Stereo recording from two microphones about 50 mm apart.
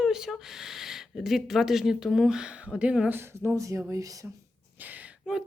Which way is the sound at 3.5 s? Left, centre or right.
Right.